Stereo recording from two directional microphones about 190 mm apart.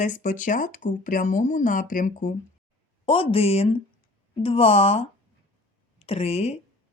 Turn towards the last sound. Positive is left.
turn(degrees=35)  # may be behind; listen again after turning